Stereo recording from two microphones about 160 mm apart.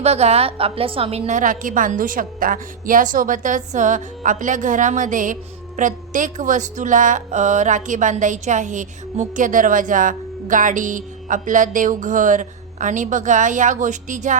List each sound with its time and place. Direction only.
0.0 s a woman's voice: 40° right (ahead or behind)